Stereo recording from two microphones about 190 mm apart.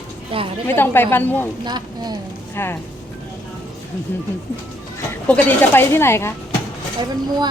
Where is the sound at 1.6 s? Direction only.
20° right (ahead or behind).